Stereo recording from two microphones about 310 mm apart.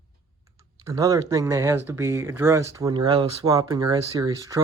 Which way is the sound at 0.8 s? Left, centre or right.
Centre.